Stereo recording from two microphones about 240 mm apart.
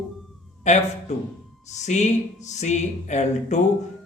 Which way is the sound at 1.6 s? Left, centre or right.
Left.